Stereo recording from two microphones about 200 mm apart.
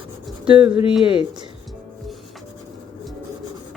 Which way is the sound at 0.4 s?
25° right (ahead or behind).